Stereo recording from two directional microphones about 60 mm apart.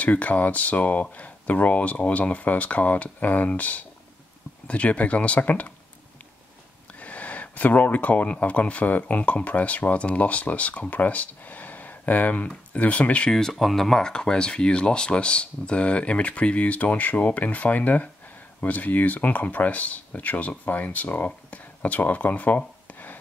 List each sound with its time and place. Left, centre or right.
0.0 s speech: left
7.0 s speech: left
13.3 s speech: centre; by 23.1 s left